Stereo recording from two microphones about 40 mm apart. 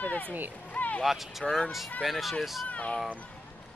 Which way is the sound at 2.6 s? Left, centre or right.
Left.